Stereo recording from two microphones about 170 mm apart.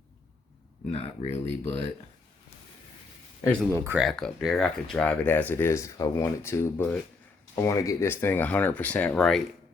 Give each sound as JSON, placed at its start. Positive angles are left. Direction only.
{"t": 0.9, "sound": "speech", "side_deg": 35}
{"t": 3.4, "sound": "speech", "side_deg": 5}
{"t": 3.7, "sound": "speech", "side_deg": -15}
{"t": 4.0, "sound": "speech", "side_deg": 0}